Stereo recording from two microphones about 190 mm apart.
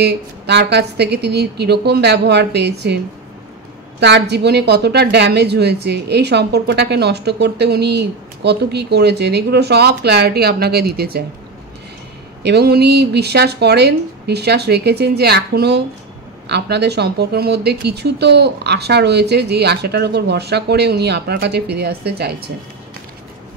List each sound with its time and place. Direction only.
0.0 s a woman's voice: 60° right (ahead or behind)
4.0 s a woman's voice: 65° right (ahead or behind)
12.4 s a woman's voice: 60° right (ahead or behind)